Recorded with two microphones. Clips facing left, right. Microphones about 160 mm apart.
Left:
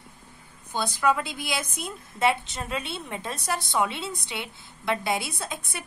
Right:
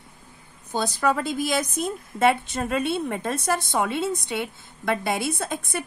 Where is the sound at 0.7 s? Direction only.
40° right (ahead or behind).